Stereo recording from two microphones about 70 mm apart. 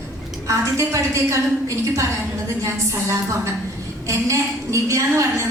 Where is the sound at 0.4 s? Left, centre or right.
Right.